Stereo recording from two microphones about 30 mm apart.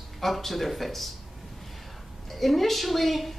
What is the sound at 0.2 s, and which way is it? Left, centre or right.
Speech, centre.